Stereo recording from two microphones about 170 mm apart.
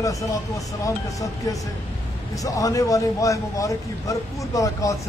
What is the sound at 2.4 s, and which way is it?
Speech, 20° left (ahead or behind).